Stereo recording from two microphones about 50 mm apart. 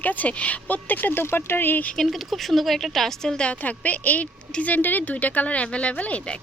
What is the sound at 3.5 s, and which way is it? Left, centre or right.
A woman's voice, left.